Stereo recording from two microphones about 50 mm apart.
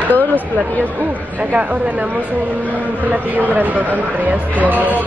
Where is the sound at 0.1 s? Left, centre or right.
Left.